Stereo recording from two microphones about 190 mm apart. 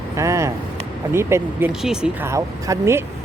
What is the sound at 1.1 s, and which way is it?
Speech, 15° right (ahead or behind).